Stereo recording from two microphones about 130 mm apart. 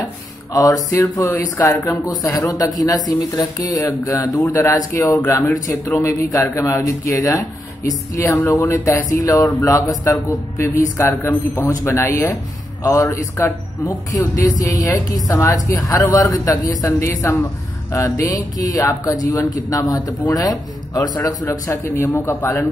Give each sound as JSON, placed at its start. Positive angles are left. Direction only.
{"t": 0.5, "sound": "speech", "side_deg": 30}